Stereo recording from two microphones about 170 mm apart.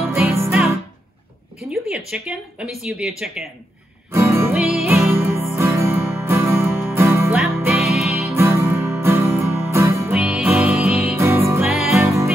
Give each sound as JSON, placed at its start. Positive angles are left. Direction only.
{"t": 0.1, "sound": "music", "side_deg": -15}
{"t": 1.7, "sound": "speech", "side_deg": -5}
{"t": 4.1, "sound": "music", "side_deg": -15}
{"t": 4.6, "sound": "music", "side_deg": 0}
{"t": 4.8, "sound": "music", "side_deg": -15}
{"t": 7.3, "sound": "music", "side_deg": 0}
{"t": 8.3, "sound": "music", "side_deg": -15}
{"t": 10.1, "sound": "music", "side_deg": -5}
{"t": 11.1, "sound": "music", "side_deg": -15}
{"t": 11.6, "sound": "music", "side_deg": 0}
{"t": 12.0, "sound": "music", "side_deg": -15}